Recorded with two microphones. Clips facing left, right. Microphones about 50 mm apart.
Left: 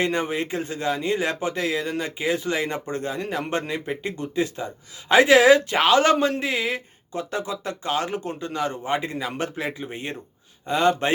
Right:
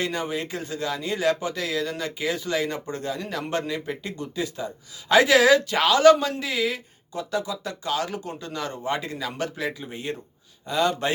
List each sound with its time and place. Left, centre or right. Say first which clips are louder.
0.0 s speech: left 4 dB; left